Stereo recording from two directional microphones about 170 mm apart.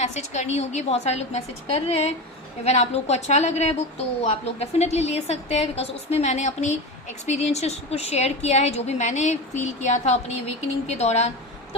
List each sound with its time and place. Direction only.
0.0 s a woman's voice: 40° left (ahead or behind)